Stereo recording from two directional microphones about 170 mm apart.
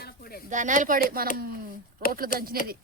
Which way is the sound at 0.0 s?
60° left (ahead or behind).